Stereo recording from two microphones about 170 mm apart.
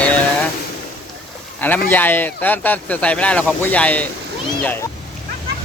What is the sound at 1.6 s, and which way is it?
Speech, 10° left (ahead or behind).